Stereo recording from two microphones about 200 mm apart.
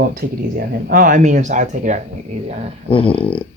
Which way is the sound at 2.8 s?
25° left (ahead or behind).